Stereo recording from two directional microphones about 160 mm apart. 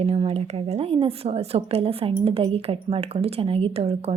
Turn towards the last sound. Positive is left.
turn(degrees=-40)  # may be behind; listen again after turning